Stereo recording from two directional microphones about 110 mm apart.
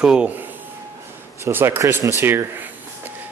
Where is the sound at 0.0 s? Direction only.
10° right (ahead or behind).